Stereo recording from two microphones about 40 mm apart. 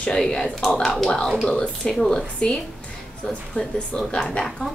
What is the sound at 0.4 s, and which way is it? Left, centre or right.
A woman's voice, centre.